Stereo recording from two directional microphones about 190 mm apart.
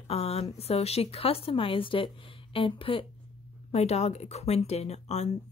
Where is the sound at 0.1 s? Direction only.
30° left (ahead or behind).